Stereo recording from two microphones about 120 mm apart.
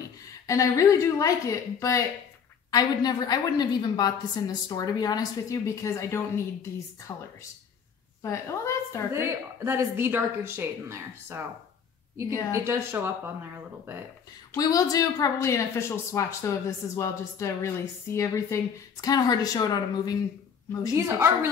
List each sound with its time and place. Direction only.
0.5 s a woman's voice: 25° left (ahead or behind)
9.1 s speech: 20° right (ahead or behind)
12.5 s speech: 20° right (ahead or behind)
14.6 s a woman's voice: 30° left (ahead or behind)
20.9 s speech: 20° right (ahead or behind)